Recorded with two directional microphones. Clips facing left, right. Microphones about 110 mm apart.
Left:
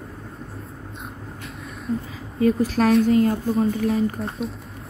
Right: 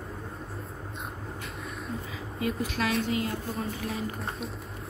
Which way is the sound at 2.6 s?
35° left (ahead or behind).